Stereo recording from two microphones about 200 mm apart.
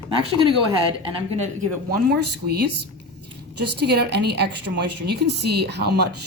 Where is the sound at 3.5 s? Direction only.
55° right (ahead or behind).